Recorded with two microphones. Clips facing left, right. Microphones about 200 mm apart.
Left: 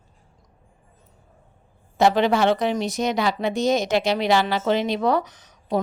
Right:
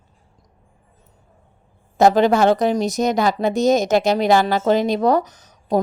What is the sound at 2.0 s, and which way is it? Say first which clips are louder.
Speech: right 4 dB; 45° right (ahead or behind).